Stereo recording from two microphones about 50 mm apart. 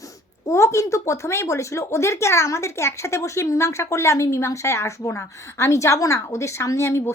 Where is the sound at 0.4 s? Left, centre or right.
Left.